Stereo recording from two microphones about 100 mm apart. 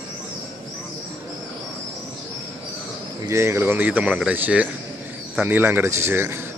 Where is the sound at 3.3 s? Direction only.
25° right (ahead or behind).